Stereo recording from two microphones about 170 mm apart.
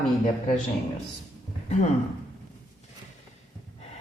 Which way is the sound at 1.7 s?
40° left (ahead or behind).